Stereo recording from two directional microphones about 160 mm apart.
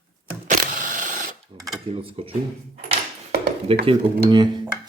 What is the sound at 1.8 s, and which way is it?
Speech, 35° right (ahead or behind).